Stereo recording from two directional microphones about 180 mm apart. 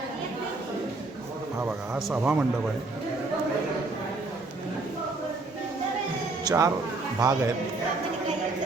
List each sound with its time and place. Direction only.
2.0 s speech: 5° right (ahead or behind)
6.4 s a sound: 20° right (ahead or behind)
7.2 s speech: 20° right (ahead or behind)